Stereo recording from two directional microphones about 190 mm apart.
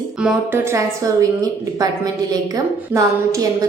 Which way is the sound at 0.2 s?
10° right (ahead or behind).